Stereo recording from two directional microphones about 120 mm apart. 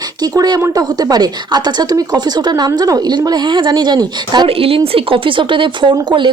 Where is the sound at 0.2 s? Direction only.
35° right (ahead or behind).